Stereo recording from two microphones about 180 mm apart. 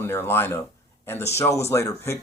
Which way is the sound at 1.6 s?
15° left (ahead or behind).